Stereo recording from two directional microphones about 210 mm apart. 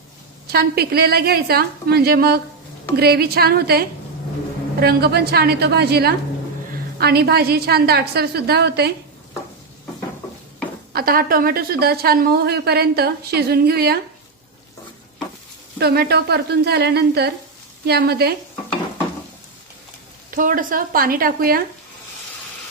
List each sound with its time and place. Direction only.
0.5 s a woman's voice: 50° right (ahead or behind)
10.9 s a woman's voice: 45° right (ahead or behind)
15.8 s a woman's voice: 50° right (ahead or behind)
20.3 s a woman's voice: 40° right (ahead or behind)